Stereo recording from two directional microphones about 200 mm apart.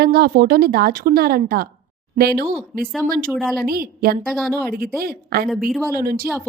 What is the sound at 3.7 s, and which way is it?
Speech, 50° right (ahead or behind).